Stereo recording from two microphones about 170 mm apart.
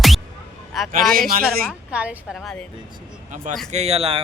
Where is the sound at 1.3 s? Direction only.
60° right (ahead or behind).